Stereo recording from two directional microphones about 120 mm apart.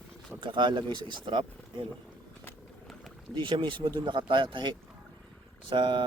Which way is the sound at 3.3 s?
40° right (ahead or behind).